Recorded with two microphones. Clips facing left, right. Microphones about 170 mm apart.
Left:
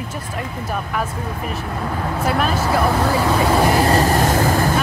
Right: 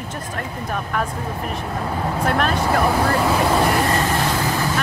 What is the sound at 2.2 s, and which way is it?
Speech, 5° left (ahead or behind).